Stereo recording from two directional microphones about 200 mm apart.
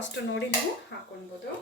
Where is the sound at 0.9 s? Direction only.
55° left (ahead or behind).